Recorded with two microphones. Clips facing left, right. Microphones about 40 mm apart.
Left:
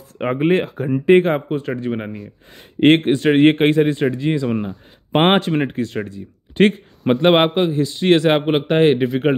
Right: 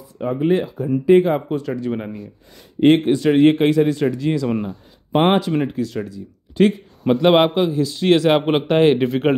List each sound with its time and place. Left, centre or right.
0.2 s speech: left
0.8 s a man's voice: left
2.8 s speech: left
4.5 s speech: centre
5.1 s speech: left
7.2 s a man's voice: left
8.4 s speech: centre
9.0 s speech: centre